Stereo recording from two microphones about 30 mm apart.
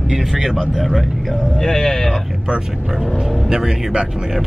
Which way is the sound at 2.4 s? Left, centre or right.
Right.